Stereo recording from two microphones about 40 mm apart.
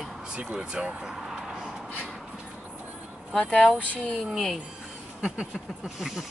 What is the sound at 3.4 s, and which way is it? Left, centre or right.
Speech, left.